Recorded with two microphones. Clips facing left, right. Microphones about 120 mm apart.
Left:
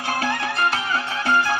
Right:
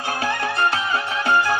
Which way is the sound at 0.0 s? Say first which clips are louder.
Even; 20° right (ahead or behind).